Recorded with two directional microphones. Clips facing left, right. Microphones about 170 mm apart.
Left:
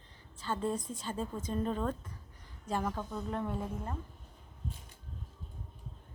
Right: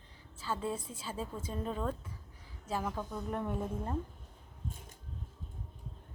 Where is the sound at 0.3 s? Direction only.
5° right (ahead or behind).